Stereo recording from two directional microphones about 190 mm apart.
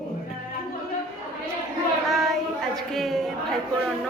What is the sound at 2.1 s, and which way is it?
A woman's voice, centre (ahead or behind).